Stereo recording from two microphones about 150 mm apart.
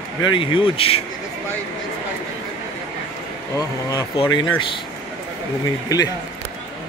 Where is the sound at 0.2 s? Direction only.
35° left (ahead or behind).